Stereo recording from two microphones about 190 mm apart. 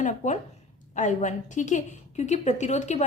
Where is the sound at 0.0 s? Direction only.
40° left (ahead or behind).